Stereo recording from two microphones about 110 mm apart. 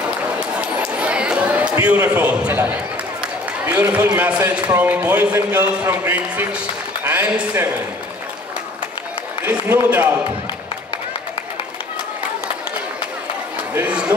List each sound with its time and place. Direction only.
0.4 s a sound: 10° right (ahead or behind)
2.0 s a man's voice: 10° right (ahead or behind)
9.8 s speech: 10° right (ahead or behind)
13.7 s speech: 10° right (ahead or behind)